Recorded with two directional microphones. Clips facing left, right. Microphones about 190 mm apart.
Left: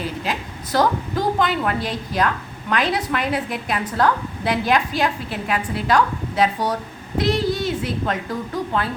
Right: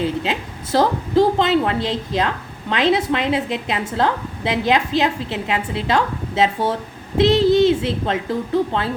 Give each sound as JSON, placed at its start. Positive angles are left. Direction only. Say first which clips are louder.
{"t": 0.0, "sound": "a woman's voice", "louder": "right 5 dB", "side_deg": -25}